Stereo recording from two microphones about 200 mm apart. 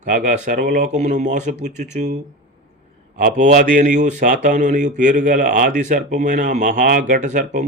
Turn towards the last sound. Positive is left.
turn(degrees=-40)  # may be behind; listen again after turning